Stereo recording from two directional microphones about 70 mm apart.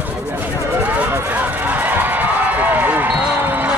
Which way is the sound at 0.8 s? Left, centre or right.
Centre.